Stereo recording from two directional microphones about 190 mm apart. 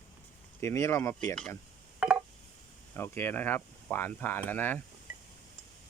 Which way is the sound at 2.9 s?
10° left (ahead or behind).